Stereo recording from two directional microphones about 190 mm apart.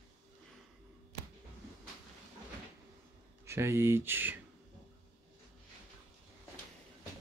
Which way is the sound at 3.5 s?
15° right (ahead or behind).